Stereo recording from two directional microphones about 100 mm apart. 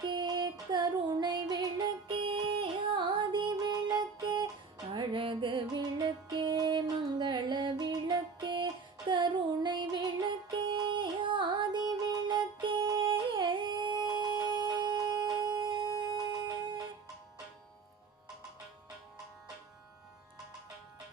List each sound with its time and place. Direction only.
0.0 s music: 50° right (ahead or behind)
2.0 s music: 60° right (ahead or behind)
4.9 s music: 60° right (ahead or behind)
12.9 s yodeling: 45° right (ahead or behind)